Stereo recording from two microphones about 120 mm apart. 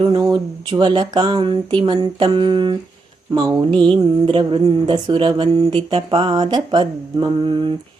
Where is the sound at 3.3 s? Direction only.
40° right (ahead or behind).